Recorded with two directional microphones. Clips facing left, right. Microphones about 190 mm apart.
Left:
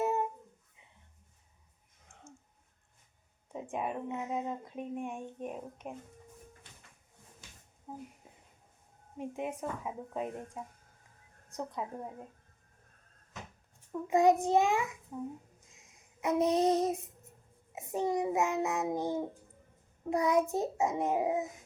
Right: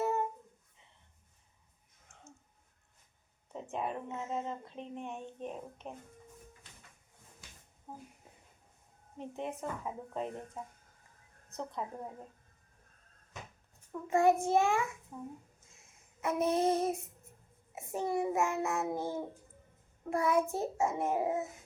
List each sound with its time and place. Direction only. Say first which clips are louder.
0.0 s a sound: left 1 dB; 20° left (ahead or behind)
3.5 s speech: left 1 dB; 10° left (ahead or behind)
7.9 s speech: left 4 dB; 10° left (ahead or behind)
9.1 s speech: left 2 dB; 10° left (ahead or behind)
13.9 s speech: left 2 dB; 15° left (ahead or behind)
15.7 s a sound: left 2 dB; 15° left (ahead or behind)
17.7 s speech: left 3 dB; 20° left (ahead or behind)